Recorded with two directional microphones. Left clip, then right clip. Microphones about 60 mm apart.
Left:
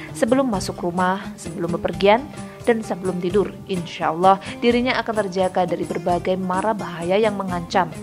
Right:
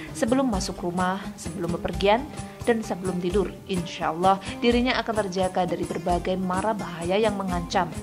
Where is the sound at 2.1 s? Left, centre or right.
Left.